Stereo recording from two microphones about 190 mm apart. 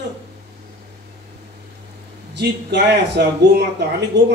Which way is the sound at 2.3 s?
65° right (ahead or behind).